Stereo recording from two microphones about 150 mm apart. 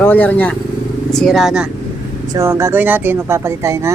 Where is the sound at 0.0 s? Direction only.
10° left (ahead or behind).